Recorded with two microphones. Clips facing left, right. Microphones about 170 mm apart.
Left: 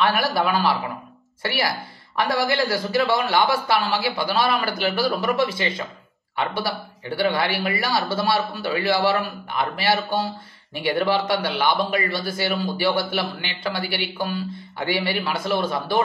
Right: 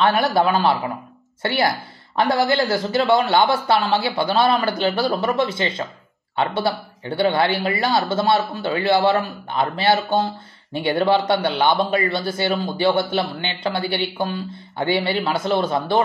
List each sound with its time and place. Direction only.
0.3 s speech: 25° right (ahead or behind)